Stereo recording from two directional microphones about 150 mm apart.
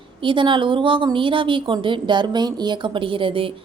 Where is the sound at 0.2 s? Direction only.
35° right (ahead or behind).